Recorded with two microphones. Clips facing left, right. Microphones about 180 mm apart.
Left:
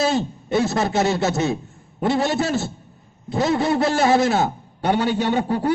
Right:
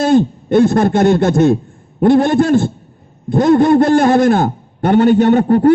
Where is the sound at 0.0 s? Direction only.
50° right (ahead or behind).